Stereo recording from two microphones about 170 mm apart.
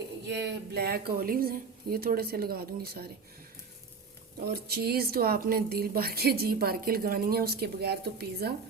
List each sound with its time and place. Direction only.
0.3 s a woman's voice: 75° right (ahead or behind)
4.7 s a woman's voice: 65° right (ahead or behind)